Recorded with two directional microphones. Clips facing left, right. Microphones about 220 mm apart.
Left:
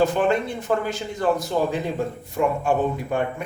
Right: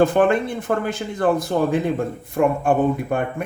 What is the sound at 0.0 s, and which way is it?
Speech, 55° right (ahead or behind).